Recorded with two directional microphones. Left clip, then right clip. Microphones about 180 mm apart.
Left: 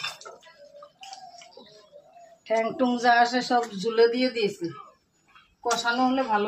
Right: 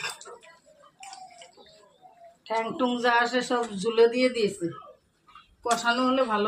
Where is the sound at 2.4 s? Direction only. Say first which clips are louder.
Left 3 dB; 35° left (ahead or behind).